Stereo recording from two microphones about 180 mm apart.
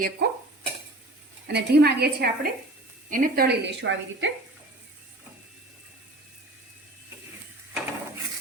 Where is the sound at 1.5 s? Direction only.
65° right (ahead or behind).